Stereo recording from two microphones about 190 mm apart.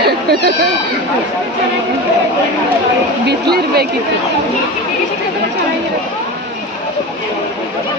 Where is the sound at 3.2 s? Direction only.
60° right (ahead or behind).